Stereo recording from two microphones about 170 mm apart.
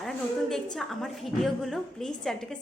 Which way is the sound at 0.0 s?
Centre (ahead or behind).